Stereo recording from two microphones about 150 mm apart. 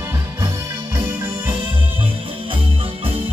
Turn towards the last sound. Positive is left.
turn(degrees=-40)  # may be behind; listen again after turning